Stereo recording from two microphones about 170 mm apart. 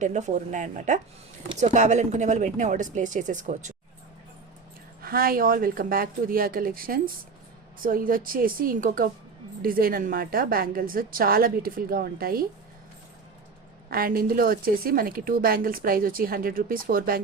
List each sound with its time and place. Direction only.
0.0 s speech: 45° right (ahead or behind)
5.0 s a woman's voice: 60° right (ahead or behind)
13.9 s a woman's voice: 60° right (ahead or behind)